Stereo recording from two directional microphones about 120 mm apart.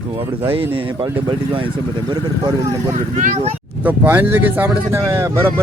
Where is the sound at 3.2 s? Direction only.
80° right.